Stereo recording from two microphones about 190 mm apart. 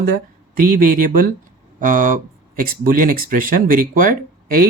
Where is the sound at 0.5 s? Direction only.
45° right (ahead or behind).